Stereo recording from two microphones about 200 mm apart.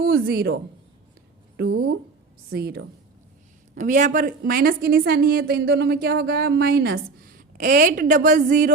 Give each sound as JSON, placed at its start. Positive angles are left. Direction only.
{"t": 0.0, "sound": "a woman's voice", "side_deg": -50}
{"t": 3.8, "sound": "a woman's voice", "side_deg": -40}